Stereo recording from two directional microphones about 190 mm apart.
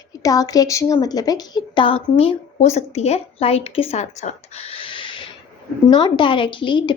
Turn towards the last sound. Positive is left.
turn(degrees=25)  # may be behind; listen again after turning